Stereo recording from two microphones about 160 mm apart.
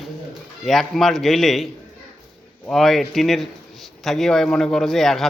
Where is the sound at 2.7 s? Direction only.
Centre (ahead or behind).